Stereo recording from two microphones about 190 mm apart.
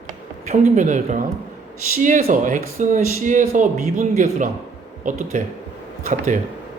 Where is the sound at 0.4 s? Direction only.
40° right (ahead or behind).